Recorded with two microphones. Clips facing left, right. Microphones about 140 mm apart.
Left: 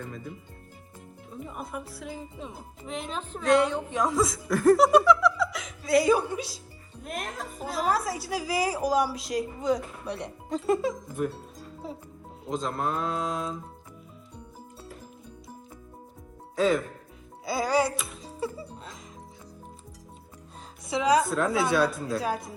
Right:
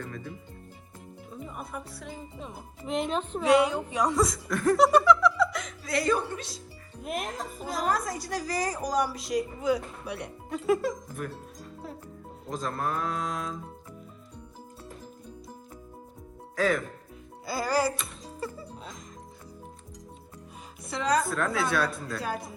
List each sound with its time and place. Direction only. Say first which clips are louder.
1.3 s speech: left 2 dB; centre (ahead or behind)
12.5 s speech: left 2 dB; 25° left (ahead or behind)
16.6 s speech: left 2 dB; 25° left (ahead or behind)
17.4 s music: left 2 dB; centre (ahead or behind)
20.9 s speech: left 4 dB; 5° left (ahead or behind)